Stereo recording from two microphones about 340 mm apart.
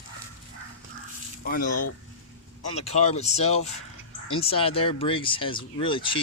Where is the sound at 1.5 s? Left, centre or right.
Left.